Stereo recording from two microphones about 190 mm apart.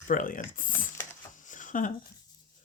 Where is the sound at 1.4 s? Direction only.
40° left (ahead or behind).